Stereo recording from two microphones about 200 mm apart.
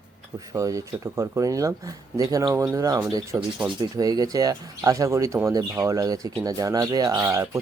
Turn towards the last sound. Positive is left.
turn(degrees=-15)  # may be behind; listen again after turning